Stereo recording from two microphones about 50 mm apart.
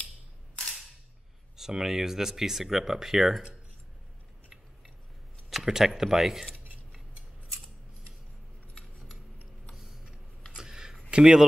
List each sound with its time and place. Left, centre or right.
1.6 s speech: centre
5.5 s speech: centre
9.8 s a sound: centre
11.1 s speech: centre